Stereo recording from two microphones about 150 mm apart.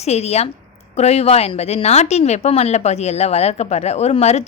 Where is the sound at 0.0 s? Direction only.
45° left (ahead or behind).